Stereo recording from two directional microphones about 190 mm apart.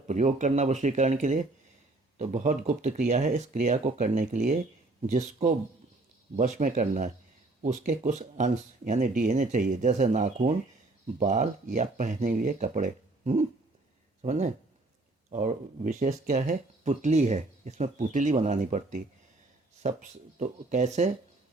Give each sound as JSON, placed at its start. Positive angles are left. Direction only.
{"t": 0.1, "sound": "speech", "side_deg": -40}